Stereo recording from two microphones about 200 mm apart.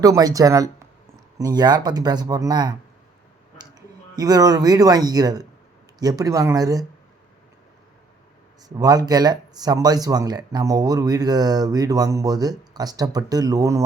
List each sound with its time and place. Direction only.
0.0 s speech: 20° right (ahead or behind)
8.8 s speech: 20° right (ahead or behind)